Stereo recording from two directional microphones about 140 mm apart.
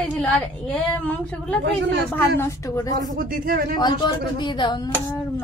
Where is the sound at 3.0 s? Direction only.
85° right.